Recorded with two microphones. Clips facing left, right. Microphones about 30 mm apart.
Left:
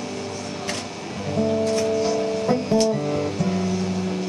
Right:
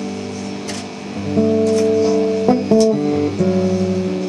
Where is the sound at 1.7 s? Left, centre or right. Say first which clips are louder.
Right 7 dB; centre.